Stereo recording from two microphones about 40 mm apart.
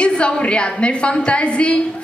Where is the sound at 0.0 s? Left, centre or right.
Left.